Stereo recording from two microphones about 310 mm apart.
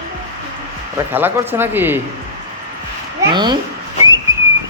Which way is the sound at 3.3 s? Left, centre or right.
Centre.